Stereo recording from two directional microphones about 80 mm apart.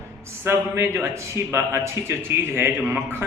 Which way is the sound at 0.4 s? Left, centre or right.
Right.